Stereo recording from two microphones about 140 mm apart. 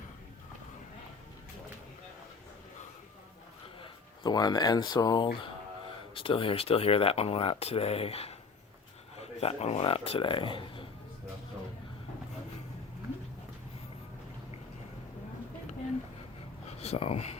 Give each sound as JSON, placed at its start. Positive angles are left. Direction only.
{"t": 3.8, "sound": "speech", "side_deg": 30}
{"t": 16.8, "sound": "speech", "side_deg": 45}